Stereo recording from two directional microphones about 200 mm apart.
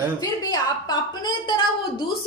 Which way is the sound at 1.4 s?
25° left (ahead or behind).